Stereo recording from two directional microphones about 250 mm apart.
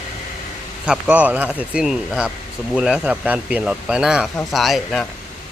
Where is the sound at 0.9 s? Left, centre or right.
Centre.